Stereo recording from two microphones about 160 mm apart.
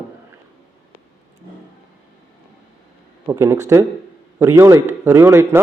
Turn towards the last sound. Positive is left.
turn(degrees=-15)  # may be behind; listen again after turning